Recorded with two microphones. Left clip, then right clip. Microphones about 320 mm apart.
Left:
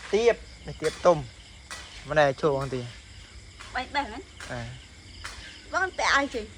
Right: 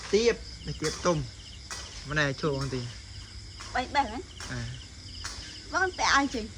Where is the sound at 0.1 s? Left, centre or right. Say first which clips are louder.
Left 2 dB; centre.